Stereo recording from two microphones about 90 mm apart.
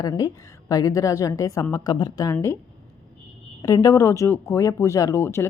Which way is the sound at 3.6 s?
40° left (ahead or behind).